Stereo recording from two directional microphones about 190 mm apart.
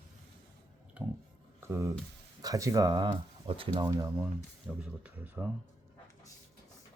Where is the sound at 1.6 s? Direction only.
15° right (ahead or behind).